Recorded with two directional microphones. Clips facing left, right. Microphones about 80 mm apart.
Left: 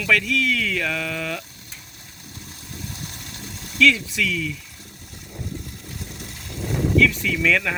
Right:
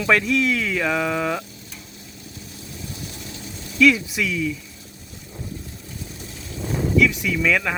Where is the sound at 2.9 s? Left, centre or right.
Left.